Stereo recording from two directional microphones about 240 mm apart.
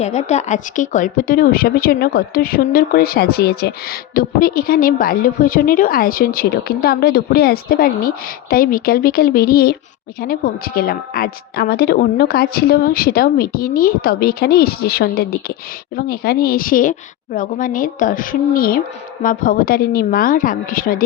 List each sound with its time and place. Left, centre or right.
0.0 s speech: left